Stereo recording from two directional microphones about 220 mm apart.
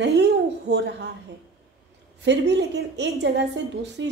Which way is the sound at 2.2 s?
55° right (ahead or behind).